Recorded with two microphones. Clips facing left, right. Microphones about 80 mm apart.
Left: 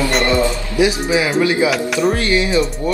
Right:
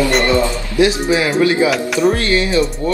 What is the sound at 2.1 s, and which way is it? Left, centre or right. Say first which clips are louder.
Speech: even; centre.